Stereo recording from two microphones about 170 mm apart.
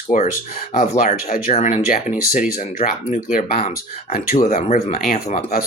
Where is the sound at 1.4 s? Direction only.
40° left (ahead or behind).